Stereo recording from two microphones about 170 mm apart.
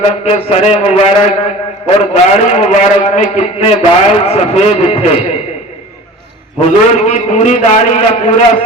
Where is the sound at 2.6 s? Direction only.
45° left (ahead or behind).